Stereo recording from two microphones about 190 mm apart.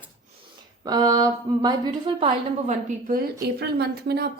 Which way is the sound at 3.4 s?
60° right (ahead or behind).